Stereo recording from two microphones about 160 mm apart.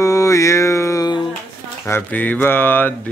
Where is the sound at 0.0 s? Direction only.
20° left (ahead or behind).